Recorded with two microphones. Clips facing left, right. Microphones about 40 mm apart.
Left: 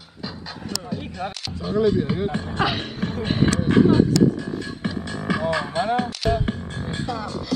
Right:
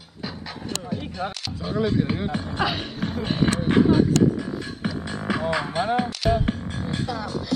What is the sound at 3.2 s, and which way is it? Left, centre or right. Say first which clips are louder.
Speech: left 2 dB; left.